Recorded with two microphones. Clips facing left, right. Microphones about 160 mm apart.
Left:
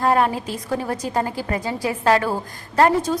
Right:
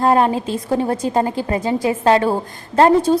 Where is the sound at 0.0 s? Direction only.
25° right (ahead or behind).